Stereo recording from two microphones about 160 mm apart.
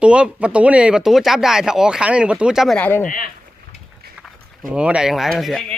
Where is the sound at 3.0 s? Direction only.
60° left (ahead or behind).